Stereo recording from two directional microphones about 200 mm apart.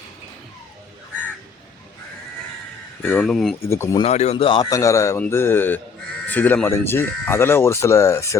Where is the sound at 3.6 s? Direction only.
15° left (ahead or behind).